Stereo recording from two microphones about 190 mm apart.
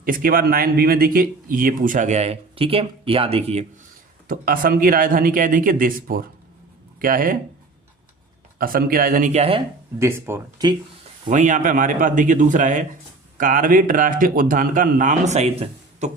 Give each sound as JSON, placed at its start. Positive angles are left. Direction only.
{"t": 0.0, "sound": "speech", "side_deg": -50}
{"t": 4.3, "sound": "speech", "side_deg": -50}
{"t": 8.5, "sound": "speech", "side_deg": -50}
{"t": 10.0, "sound": "speech", "side_deg": -15}
{"t": 11.3, "sound": "speech", "side_deg": -40}